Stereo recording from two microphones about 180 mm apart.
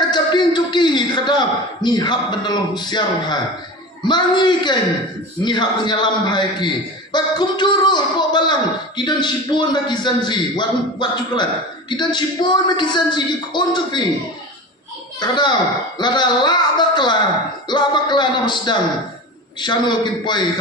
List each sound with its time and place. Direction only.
0.1 s a man's voice: 25° left (ahead or behind)
15.1 s a man's voice: 25° left (ahead or behind)